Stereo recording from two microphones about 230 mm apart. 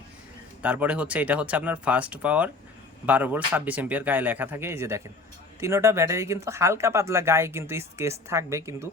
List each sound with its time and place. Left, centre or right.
0.6 s speech: centre